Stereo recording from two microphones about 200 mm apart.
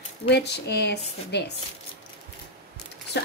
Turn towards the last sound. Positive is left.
turn(degrees=55)  # may be behind; listen again after turning